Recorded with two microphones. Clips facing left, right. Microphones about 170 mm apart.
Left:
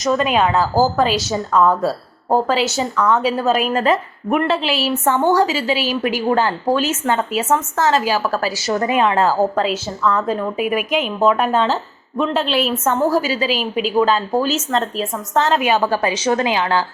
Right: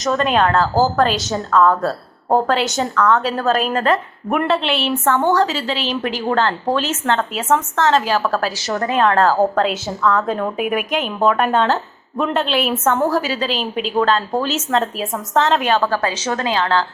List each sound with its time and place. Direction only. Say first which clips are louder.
0.0 s a woman's voice: even; centre (ahead or behind)
5.0 s a woman's voice: left 1 dB; 15° left (ahead or behind)
5.3 s a woman's voice: left 1 dB; centre (ahead or behind)